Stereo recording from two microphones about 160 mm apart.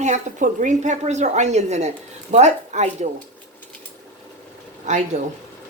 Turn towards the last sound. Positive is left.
turn(degrees=-45)  # may be behind; listen again after turning